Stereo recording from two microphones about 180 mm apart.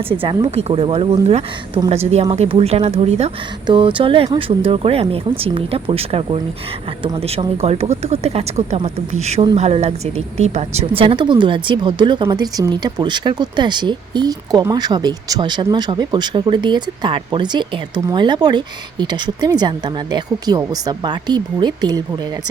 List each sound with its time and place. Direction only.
0.1 s a woman's voice: 30° right (ahead or behind)